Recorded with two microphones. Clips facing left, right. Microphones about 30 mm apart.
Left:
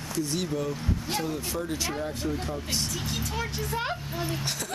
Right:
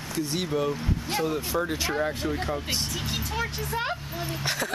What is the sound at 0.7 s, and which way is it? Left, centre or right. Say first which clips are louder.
Speech: right 2 dB; centre.